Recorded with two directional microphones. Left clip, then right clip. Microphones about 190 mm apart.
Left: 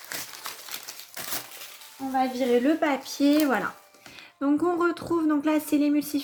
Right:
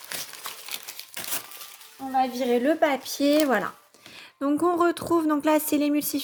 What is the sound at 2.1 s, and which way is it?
Speech, 45° right (ahead or behind).